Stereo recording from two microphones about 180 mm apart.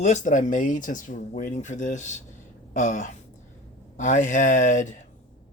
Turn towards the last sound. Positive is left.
turn(degrees=45)  # may be behind; listen again after turning